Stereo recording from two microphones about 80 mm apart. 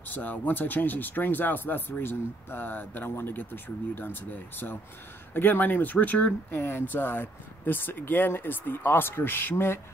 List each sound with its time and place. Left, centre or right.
0.1 s speech: left